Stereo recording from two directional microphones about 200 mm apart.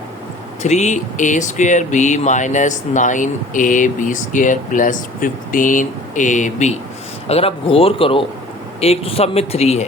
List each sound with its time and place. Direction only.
0.6 s speech: 35° left (ahead or behind)